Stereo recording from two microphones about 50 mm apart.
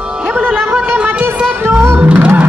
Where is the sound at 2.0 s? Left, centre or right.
Right.